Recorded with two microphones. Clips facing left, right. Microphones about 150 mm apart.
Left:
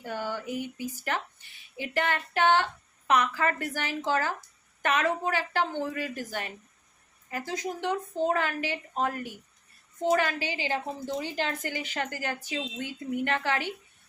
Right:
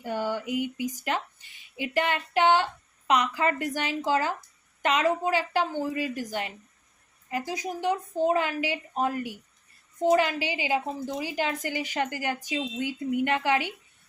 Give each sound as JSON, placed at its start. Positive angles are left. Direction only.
{"t": 0.0, "sound": "a woman's voice", "side_deg": -15}